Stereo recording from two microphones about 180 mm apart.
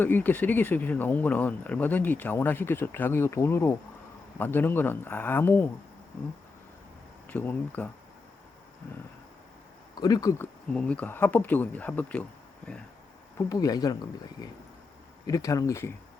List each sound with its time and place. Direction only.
0.0 s speech: 10° left (ahead or behind)
7.3 s speech: 10° left (ahead or behind)
10.0 s speech: 20° left (ahead or behind)
13.5 s speech: 20° left (ahead or behind)
15.3 s speech: 20° left (ahead or behind)